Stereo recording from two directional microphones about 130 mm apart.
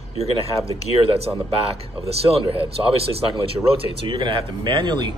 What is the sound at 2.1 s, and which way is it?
Speech, 50° right (ahead or behind).